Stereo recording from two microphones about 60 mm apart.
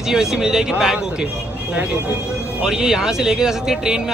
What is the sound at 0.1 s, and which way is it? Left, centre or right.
Speech, centre.